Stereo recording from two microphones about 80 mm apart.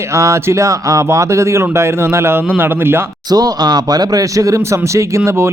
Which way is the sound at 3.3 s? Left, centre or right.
Right.